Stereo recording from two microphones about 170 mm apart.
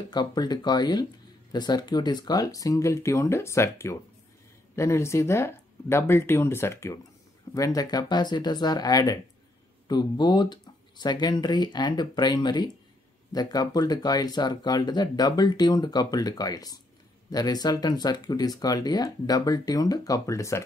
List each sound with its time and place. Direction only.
0.1 s speech: 25° left (ahead or behind)